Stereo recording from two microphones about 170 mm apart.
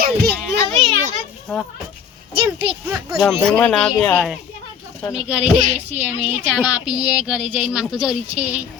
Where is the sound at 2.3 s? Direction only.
30° right (ahead or behind).